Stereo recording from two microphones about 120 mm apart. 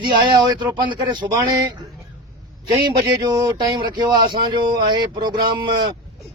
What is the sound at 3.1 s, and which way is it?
Speech, 35° right (ahead or behind).